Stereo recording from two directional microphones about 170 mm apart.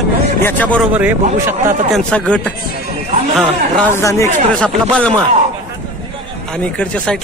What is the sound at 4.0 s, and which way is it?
Speech, 20° left (ahead or behind).